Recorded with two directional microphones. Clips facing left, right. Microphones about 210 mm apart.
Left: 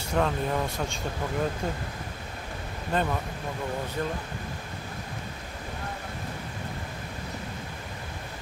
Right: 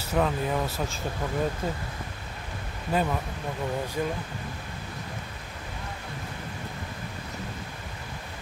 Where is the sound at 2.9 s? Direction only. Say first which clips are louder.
Right 1 dB; 5° right (ahead or behind).